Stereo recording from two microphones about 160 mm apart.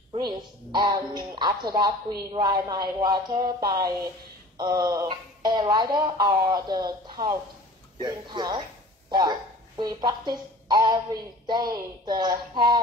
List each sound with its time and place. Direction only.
0.1 s speech: 30° right (ahead or behind)